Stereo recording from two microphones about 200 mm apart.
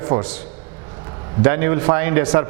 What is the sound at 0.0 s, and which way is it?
Speech, 15° right (ahead or behind).